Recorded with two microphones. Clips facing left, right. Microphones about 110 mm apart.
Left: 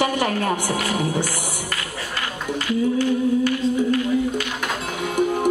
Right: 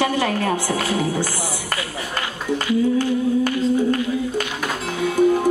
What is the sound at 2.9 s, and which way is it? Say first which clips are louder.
Humming: even; 45° right (ahead or behind).